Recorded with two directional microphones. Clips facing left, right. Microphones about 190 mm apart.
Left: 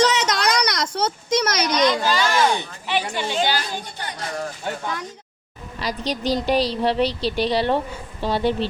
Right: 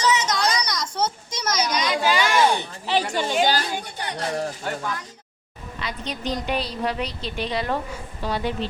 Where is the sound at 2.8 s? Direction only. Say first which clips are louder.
Right 2 dB; 40° right (ahead or behind).